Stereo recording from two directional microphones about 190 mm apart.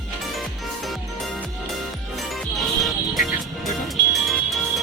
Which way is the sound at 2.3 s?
Centre (ahead or behind).